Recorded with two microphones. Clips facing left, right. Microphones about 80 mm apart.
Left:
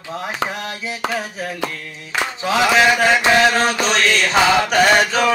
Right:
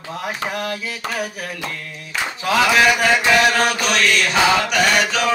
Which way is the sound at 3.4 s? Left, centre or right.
Left.